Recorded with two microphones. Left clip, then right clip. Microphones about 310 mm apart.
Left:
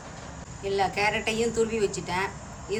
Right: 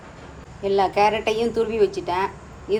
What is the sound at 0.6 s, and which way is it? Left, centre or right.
A woman's voice, centre.